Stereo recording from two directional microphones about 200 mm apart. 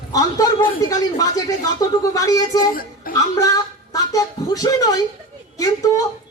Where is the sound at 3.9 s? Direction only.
15° left (ahead or behind).